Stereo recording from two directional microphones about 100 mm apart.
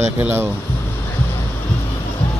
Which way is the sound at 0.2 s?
20° right (ahead or behind).